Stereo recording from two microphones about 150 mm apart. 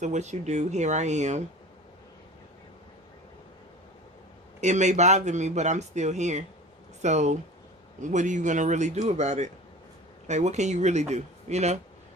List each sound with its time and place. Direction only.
0.0 s speech: 50° right (ahead or behind)
4.6 s speech: 50° right (ahead or behind)